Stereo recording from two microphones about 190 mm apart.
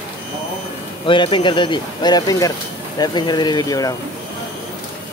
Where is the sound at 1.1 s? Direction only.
25° left (ahead or behind).